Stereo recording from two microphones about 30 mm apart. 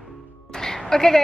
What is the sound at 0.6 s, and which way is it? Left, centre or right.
Music, centre.